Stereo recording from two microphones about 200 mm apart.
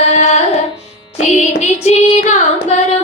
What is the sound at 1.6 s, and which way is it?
A woman's voice, 35° left (ahead or behind).